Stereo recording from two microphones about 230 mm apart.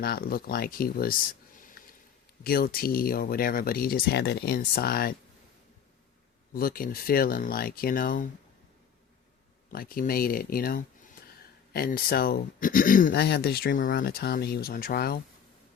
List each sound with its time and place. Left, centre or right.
0.0 s speech: left
2.4 s speech: left
6.5 s speech: left
9.7 s speech: left